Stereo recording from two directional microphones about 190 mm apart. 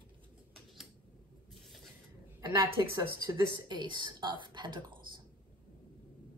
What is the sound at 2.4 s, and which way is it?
A man's voice, 20° right (ahead or behind).